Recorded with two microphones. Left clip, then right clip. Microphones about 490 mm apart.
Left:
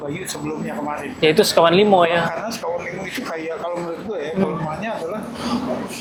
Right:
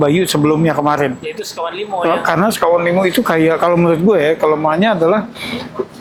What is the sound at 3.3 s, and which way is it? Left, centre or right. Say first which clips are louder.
Speech: right 13 dB; right.